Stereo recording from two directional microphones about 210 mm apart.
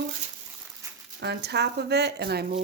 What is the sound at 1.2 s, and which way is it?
Speech, 50° right (ahead or behind).